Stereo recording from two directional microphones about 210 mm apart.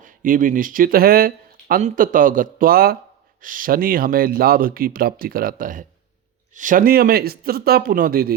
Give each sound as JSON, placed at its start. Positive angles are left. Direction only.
{"t": 0.0, "sound": "speech", "side_deg": -40}